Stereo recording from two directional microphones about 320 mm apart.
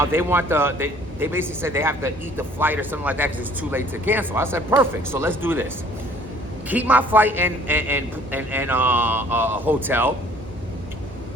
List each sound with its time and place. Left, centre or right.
0.0 s a man's voice: centre